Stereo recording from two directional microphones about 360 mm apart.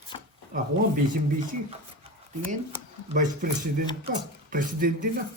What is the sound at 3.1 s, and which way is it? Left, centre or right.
Speech, right.